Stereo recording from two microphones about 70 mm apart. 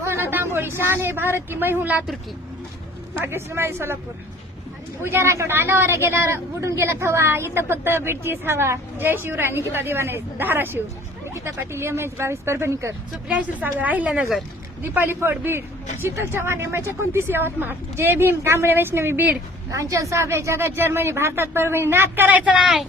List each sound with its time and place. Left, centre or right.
0.0 s a woman's voice: right
3.2 s speech: right
5.0 s speech: right
13.2 s a woman's voice: right
19.7 s speech: right
22.6 s speech: centre